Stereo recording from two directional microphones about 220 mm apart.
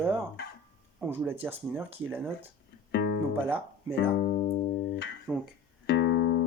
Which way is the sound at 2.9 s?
50° left (ahead or behind).